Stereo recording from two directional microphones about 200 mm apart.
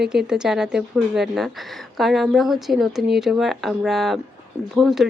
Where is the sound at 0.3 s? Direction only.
5° right (ahead or behind).